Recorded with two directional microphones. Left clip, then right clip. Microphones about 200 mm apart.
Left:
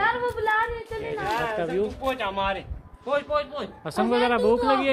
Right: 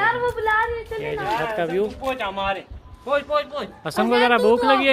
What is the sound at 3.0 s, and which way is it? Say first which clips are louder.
Speech: right 3 dB; 50° right (ahead or behind).